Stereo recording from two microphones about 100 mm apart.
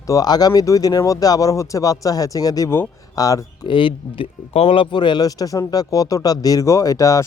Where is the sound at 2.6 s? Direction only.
25° left (ahead or behind).